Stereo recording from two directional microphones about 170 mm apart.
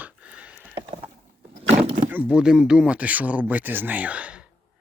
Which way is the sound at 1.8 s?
35° right (ahead or behind).